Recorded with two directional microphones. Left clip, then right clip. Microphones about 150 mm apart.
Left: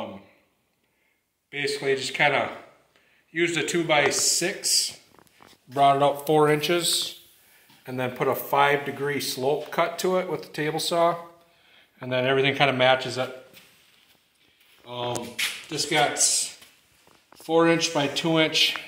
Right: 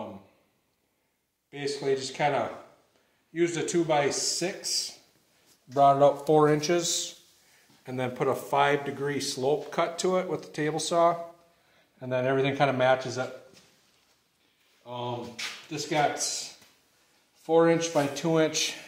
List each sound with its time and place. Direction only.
1.8 s speech: 30° right (ahead or behind)
5.8 s speech: 40° right (ahead or behind)
7.8 s speech: 20° right (ahead or behind)
14.8 s speech: 40° right (ahead or behind)
17.5 s speech: 30° right (ahead or behind)